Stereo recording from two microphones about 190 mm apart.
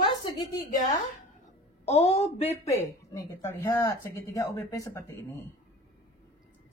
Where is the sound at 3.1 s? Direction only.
15° left (ahead or behind).